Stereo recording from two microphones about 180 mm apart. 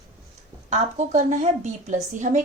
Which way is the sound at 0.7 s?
40° right (ahead or behind).